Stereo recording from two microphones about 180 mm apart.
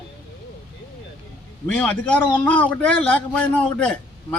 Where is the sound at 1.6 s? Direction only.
5° left (ahead or behind).